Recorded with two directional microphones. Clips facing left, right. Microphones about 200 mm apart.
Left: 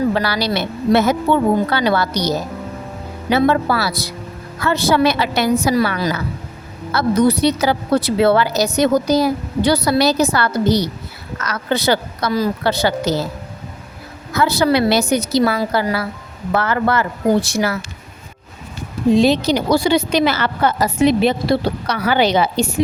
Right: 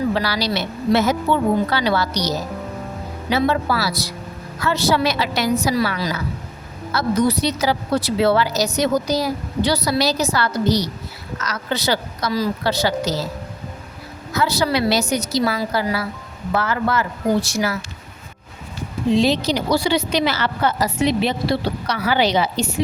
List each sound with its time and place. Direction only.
0.1 s a woman's voice: 55° left (ahead or behind)
14.3 s a woman's voice: 55° left (ahead or behind)
19.1 s a woman's voice: 50° left (ahead or behind)